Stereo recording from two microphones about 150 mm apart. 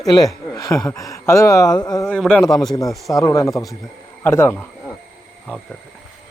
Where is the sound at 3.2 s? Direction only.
20° left (ahead or behind).